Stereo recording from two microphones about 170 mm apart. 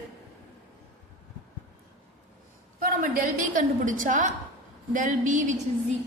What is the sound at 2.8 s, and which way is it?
A woman's voice, 50° right (ahead or behind).